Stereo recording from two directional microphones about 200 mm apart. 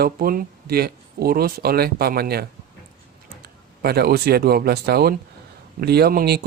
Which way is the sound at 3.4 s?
50° right (ahead or behind).